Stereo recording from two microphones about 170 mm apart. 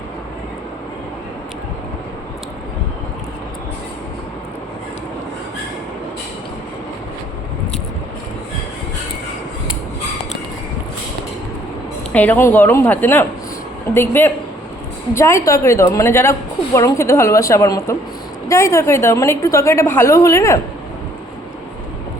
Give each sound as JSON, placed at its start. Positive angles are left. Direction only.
{"t": 12.1, "sound": "a woman's voice", "side_deg": 10}